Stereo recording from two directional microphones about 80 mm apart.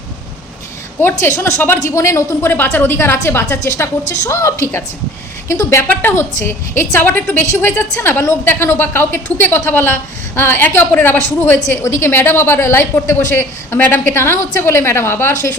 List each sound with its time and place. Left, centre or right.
1.0 s a woman's voice: left
1.8 s a woman's voice: left
2.4 s a woman's voice: left
7.4 s a woman's voice: left